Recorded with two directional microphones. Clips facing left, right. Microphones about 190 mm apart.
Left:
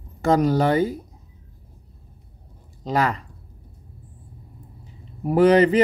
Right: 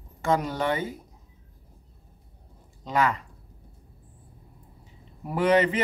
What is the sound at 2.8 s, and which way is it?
Speech, 35° left (ahead or behind).